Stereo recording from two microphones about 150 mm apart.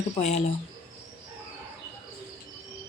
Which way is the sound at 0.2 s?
45° left (ahead or behind).